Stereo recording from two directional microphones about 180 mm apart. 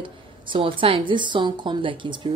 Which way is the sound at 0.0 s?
30° right (ahead or behind).